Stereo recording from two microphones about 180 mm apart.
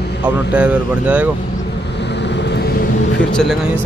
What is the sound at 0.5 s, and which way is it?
Speech, 5° right (ahead or behind).